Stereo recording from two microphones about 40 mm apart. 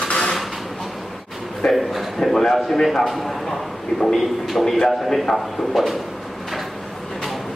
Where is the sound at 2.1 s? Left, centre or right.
Centre.